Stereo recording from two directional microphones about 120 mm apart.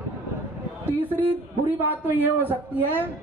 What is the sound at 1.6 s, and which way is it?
Speech, 15° right (ahead or behind).